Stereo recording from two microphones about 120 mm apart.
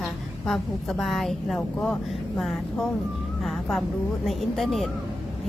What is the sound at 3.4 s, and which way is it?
Speech, centre (ahead or behind).